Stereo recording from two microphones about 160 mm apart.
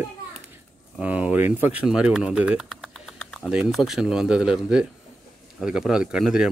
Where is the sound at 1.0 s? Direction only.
10° right (ahead or behind).